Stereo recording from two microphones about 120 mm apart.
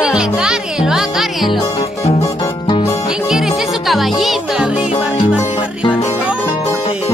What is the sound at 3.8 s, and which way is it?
Music, centre (ahead or behind).